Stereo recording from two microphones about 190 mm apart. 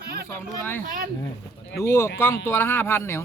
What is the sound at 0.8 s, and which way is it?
Speech, 45° right (ahead or behind).